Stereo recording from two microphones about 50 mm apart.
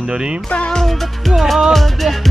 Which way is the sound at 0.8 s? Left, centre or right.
Centre.